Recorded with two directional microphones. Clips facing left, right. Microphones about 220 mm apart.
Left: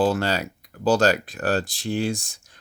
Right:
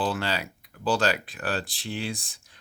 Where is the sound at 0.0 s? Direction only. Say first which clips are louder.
Left 7 dB; 45° left (ahead or behind).